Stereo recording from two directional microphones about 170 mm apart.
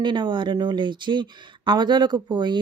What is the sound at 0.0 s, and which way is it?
Speech, 30° right (ahead or behind).